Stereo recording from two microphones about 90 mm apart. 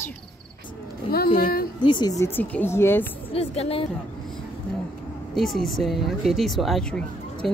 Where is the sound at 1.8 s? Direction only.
60° left (ahead or behind).